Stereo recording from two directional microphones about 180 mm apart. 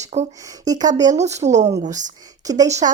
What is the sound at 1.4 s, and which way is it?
Speech, 40° right (ahead or behind).